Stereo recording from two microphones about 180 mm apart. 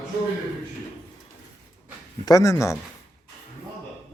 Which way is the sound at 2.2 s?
20° left (ahead or behind).